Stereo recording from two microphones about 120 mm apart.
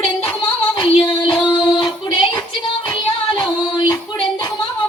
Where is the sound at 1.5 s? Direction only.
40° left (ahead or behind).